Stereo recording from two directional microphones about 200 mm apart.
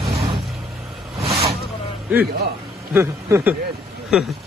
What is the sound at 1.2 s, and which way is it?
Vehicle, 30° right (ahead or behind).